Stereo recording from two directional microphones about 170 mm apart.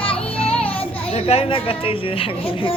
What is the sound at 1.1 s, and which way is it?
A child's voice, 35° left (ahead or behind).